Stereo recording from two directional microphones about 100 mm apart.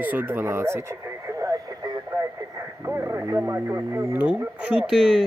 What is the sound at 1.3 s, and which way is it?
Radio, 35° right (ahead or behind).